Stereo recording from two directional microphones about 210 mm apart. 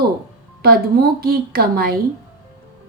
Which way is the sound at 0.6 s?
45° right (ahead or behind).